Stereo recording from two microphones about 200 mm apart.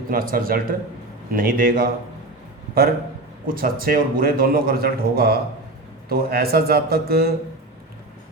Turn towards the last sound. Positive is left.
turn(degrees=-50)  # may be behind; listen again after turning